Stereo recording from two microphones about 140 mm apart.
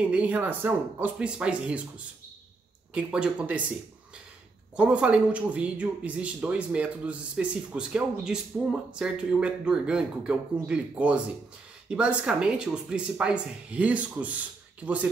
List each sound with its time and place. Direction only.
0.0 s a man's voice: 10° right (ahead or behind)
2.9 s a man's voice: 5° right (ahead or behind)
4.7 s a man's voice: 10° right (ahead or behind)